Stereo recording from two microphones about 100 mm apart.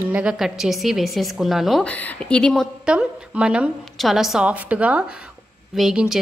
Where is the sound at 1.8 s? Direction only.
15° left (ahead or behind).